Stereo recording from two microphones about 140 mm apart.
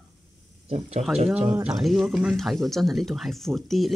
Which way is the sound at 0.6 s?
50° right (ahead or behind).